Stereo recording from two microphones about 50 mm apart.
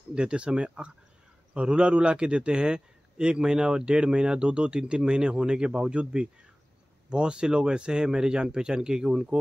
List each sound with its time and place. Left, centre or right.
0.1 s a man's voice: centre